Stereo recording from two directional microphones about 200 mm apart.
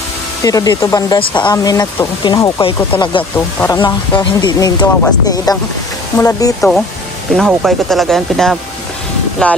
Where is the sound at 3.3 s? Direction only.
10° left (ahead or behind).